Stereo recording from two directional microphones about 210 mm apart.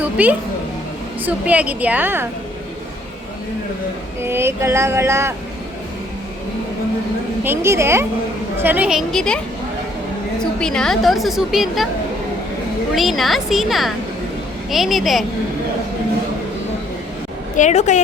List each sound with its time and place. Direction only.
0.0 s a woman's voice: 5° right (ahead or behind)
4.2 s speech: 10° right (ahead or behind)
7.4 s a woman's voice: 10° right (ahead or behind)
10.4 s a woman's voice: 5° left (ahead or behind)
12.9 s a woman's voice: centre (ahead or behind)
17.6 s a woman's voice: 35° left (ahead or behind)